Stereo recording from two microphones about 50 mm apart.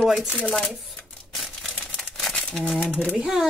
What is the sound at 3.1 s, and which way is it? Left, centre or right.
Speech, centre.